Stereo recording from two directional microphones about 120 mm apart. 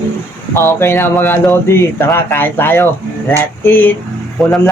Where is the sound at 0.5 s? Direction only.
20° left (ahead or behind).